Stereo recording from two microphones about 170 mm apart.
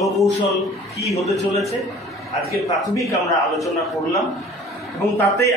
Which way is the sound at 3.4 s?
Centre (ahead or behind).